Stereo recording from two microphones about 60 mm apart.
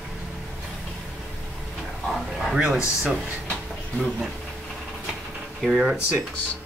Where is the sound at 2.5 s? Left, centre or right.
Centre.